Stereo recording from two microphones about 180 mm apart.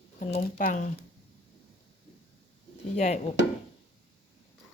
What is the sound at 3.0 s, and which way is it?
Speech, 40° left (ahead or behind).